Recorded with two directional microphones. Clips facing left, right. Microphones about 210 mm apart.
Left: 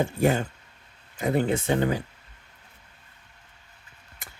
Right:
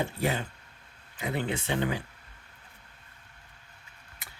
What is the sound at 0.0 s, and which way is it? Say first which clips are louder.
Speech: left 7 dB; 45° left (ahead or behind).